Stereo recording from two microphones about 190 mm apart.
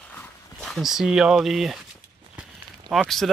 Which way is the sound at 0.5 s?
Centre (ahead or behind).